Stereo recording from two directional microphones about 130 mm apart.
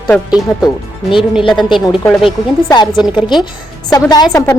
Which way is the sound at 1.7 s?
40° left (ahead or behind).